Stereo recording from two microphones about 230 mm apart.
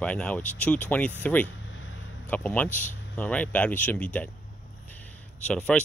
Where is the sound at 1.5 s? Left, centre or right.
Left.